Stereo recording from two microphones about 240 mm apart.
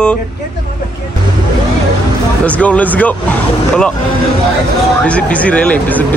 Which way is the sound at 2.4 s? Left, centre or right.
Centre.